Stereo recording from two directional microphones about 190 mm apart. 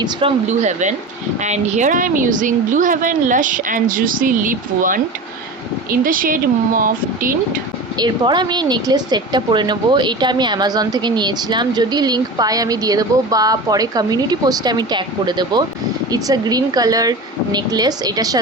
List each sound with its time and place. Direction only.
0.0 s a woman's voice: 30° right (ahead or behind); by 7.3 s 45° right (ahead or behind)
7.9 s speech: 20° right (ahead or behind)